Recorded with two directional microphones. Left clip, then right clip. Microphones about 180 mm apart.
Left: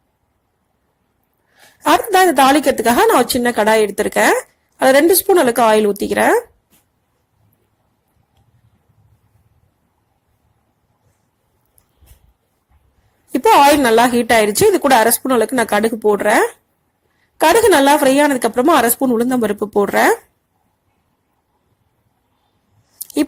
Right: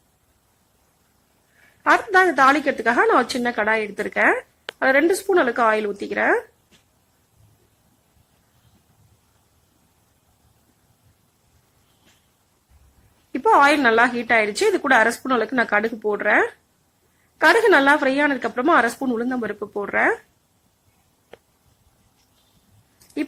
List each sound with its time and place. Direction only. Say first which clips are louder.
1.9 s a woman's voice: left 4 dB; 30° left (ahead or behind)
13.8 s a woman's voice: left 5 dB; 30° left (ahead or behind)